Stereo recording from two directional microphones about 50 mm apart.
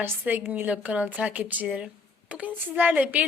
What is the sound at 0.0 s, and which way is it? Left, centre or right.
A woman's voice, right.